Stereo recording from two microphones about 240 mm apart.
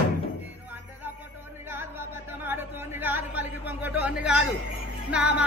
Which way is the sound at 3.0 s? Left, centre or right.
Centre.